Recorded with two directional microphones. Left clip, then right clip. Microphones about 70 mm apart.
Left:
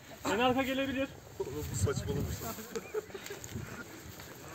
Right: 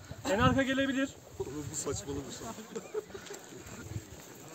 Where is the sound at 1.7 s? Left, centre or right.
Right.